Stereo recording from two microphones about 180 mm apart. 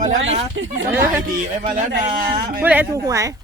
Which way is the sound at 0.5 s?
90° right.